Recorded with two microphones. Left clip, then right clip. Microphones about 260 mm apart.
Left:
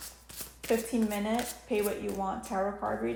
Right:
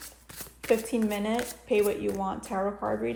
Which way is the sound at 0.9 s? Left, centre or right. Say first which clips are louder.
Right 2 dB; right.